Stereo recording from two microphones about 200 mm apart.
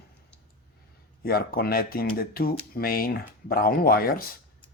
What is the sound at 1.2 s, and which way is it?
Speech, 50° left (ahead or behind).